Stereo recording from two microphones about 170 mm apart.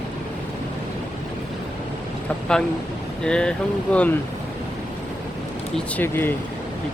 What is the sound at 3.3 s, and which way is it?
Speech, 5° left (ahead or behind).